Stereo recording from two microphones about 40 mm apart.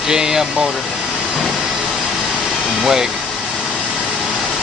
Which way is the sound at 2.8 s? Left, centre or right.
Centre.